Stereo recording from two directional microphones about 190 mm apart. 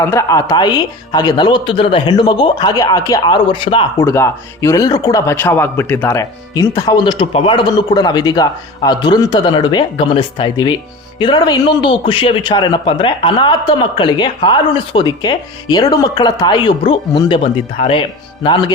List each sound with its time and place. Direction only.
0.0 s a man's voice: 15° left (ahead or behind)
3.9 s a man's voice: 15° left (ahead or behind)